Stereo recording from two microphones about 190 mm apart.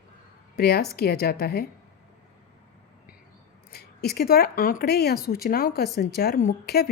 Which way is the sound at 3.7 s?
55° left (ahead or behind).